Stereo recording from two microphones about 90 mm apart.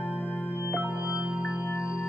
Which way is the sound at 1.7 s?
35° left (ahead or behind).